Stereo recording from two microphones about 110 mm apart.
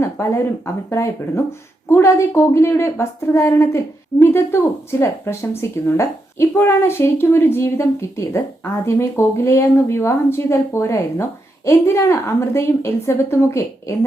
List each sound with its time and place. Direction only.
0.0 s speech: 25° left (ahead or behind)